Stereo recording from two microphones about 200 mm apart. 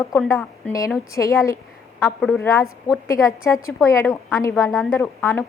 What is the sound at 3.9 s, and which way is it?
Speech, 15° left (ahead or behind).